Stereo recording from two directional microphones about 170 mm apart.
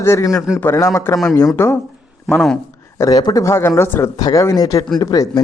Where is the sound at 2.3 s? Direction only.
Centre (ahead or behind).